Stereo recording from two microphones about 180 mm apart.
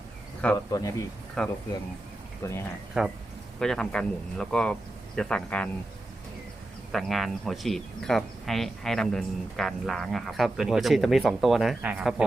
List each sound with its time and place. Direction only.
0.7 s speech: 20° left (ahead or behind)
1.4 s speech: 5° left (ahead or behind)
2.4 s speech: 15° left (ahead or behind)
3.0 s speech: centre (ahead or behind)
6.9 s speech: centre (ahead or behind)